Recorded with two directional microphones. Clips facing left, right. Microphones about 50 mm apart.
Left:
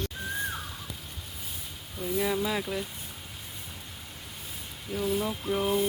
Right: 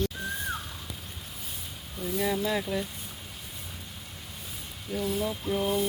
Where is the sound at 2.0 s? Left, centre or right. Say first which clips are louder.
Even; centre.